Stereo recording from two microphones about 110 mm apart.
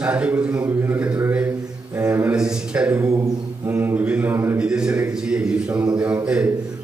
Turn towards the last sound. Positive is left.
turn(degrees=-5)  # may be behind; listen again after turning